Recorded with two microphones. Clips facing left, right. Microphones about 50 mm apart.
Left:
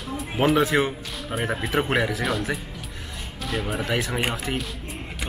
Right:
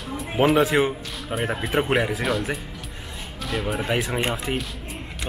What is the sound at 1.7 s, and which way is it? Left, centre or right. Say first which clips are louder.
Speech: right 1 dB; centre.